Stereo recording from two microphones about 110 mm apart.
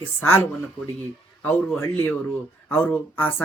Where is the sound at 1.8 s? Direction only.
20° left (ahead or behind).